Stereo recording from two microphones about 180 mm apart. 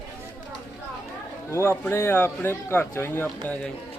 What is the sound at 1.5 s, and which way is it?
Speech, 15° left (ahead or behind).